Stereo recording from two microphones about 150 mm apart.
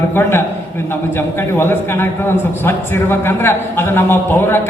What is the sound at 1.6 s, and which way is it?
A man's voice, 15° left (ahead or behind).